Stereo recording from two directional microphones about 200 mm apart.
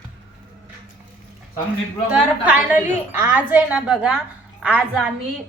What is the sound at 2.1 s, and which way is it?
A woman's voice, 10° right (ahead or behind).